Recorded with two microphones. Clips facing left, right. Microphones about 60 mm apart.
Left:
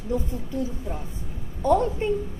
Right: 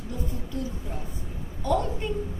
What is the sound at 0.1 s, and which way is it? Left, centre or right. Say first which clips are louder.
Speech: left 9 dB; left.